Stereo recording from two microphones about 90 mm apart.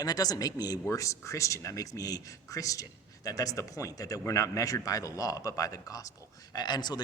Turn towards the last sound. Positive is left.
turn(degrees=50)  # may be behind; listen again after turning